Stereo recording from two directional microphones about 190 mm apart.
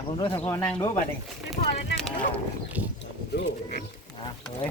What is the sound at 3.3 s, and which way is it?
Speech, 65° left (ahead or behind).